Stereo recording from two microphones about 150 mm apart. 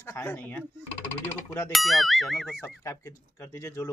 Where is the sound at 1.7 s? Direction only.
Centre (ahead or behind).